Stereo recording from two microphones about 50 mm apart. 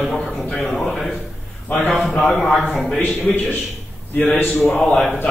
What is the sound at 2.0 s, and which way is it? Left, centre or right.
Speech, centre.